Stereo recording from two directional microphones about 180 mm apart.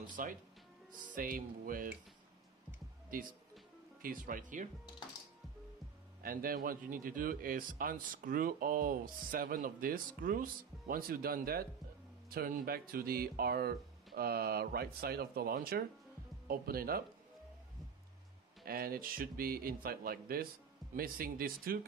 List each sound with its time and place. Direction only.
0.0 s speech: 50° right (ahead or behind)
4.0 s speech: 50° right (ahead or behind)
6.2 s speech: 55° right (ahead or behind)
18.6 s speech: 55° right (ahead or behind)